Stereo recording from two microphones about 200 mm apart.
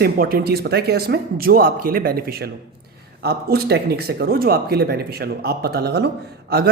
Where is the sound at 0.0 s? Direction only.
50° right (ahead or behind).